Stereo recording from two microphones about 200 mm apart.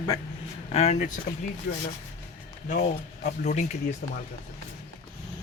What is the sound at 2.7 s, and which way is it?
Speech, 40° left (ahead or behind).